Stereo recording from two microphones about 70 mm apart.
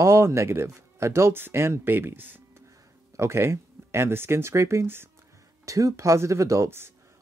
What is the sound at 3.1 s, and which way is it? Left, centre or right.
Speech, right.